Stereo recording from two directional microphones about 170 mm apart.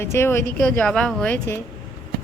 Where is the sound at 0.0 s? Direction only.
15° left (ahead or behind).